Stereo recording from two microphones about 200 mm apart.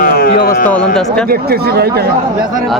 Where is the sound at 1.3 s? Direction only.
50° right (ahead or behind).